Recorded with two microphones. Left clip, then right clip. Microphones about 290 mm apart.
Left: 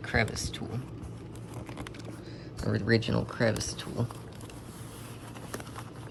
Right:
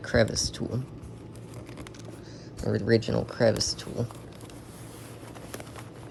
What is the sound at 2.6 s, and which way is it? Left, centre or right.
Speech, centre.